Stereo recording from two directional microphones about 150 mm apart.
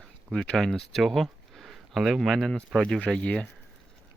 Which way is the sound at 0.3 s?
Centre (ahead or behind).